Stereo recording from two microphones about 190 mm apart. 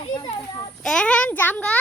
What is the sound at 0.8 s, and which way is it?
A child's voice, 5° left (ahead or behind).